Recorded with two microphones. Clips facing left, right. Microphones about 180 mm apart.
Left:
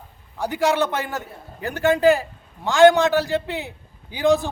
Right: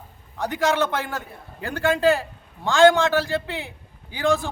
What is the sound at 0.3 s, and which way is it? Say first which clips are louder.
A man's voice: left 2 dB; 10° left (ahead or behind).